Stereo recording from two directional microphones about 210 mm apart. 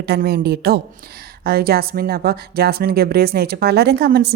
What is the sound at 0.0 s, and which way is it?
A woman's voice, 50° right (ahead or behind).